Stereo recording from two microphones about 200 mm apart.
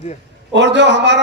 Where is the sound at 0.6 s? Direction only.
60° right (ahead or behind).